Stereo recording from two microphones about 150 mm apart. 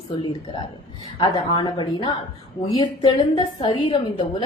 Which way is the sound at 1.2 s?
30° left (ahead or behind).